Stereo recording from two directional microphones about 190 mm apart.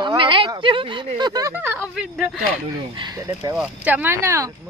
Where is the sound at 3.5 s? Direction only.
5° right (ahead or behind).